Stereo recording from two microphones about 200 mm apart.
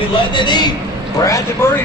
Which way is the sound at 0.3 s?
20° left (ahead or behind).